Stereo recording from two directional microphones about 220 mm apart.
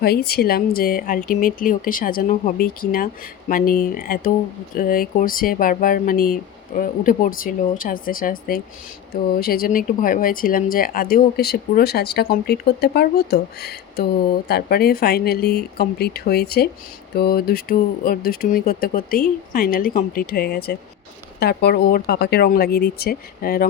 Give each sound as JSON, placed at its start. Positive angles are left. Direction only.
{"t": 0.0, "sound": "speech", "side_deg": 45}